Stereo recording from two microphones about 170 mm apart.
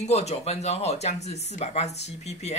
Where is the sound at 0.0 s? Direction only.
40° left (ahead or behind).